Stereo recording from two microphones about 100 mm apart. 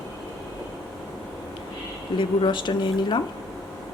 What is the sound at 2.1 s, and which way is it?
Speech, 50° left (ahead or behind).